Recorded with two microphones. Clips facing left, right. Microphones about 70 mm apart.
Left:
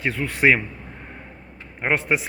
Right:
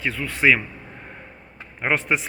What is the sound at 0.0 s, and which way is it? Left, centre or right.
Speech, left.